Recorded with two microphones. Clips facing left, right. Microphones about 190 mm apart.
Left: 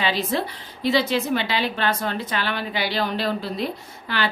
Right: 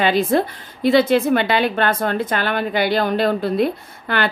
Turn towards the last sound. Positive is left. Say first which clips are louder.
# right 5 dB
turn(degrees=-55)  # may be behind; listen again after turning